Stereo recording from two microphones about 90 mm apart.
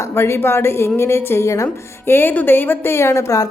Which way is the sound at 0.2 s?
25° left (ahead or behind).